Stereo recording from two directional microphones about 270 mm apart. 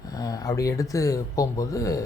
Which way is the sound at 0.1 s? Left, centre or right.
Centre.